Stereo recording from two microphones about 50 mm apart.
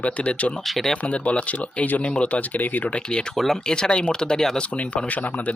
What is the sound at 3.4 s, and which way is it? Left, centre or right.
Speech, centre.